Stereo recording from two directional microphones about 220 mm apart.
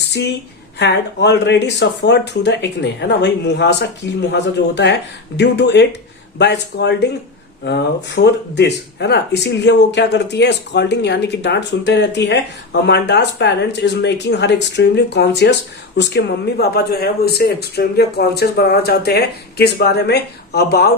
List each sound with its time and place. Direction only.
0.0 s a woman's voice: 50° left (ahead or behind)